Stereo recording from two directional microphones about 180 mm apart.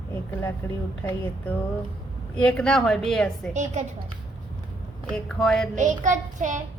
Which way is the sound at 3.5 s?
40° right (ahead or behind).